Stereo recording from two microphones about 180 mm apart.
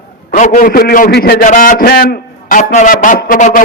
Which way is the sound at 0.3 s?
45° left (ahead or behind).